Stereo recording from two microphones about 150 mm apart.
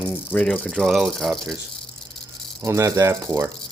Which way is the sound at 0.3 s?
10° left (ahead or behind).